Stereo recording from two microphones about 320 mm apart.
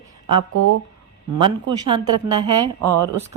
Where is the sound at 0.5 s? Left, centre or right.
Right.